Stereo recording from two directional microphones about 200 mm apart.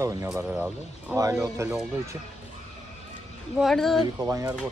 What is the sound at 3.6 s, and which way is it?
Speech, centre (ahead or behind).